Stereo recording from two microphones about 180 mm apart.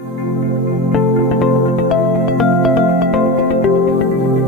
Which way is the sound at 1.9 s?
Centre (ahead or behind).